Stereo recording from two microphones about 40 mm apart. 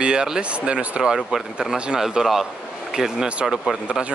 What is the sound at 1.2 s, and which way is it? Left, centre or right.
Speech, centre.